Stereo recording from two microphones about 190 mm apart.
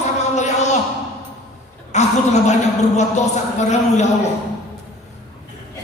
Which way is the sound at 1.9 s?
35° left (ahead or behind).